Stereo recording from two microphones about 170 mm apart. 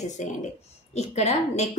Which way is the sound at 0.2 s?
45° left (ahead or behind).